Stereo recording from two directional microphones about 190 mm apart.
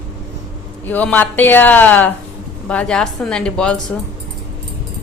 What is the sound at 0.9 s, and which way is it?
A woman's voice, 10° left (ahead or behind).